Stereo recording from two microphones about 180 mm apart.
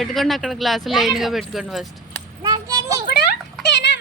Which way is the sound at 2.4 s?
20° right (ahead or behind).